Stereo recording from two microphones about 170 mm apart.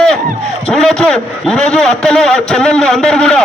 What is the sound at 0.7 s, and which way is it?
A man's voice, 5° left (ahead or behind).